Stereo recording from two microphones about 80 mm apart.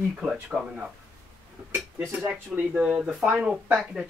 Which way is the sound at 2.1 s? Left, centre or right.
Centre.